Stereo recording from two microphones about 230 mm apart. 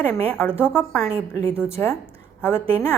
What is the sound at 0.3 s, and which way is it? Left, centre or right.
Speech, centre.